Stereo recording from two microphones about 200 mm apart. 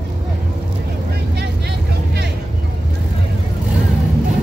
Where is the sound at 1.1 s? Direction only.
55° right (ahead or behind).